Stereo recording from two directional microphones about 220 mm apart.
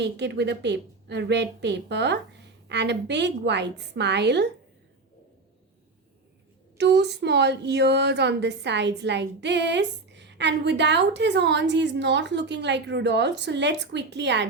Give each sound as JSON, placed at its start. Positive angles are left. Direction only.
{"t": 0.0, "sound": "a woman's voice", "side_deg": -50}
{"t": 6.7, "sound": "a woman's voice", "side_deg": -50}